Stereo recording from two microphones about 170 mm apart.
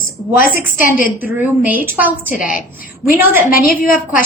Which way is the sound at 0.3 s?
55° left (ahead or behind).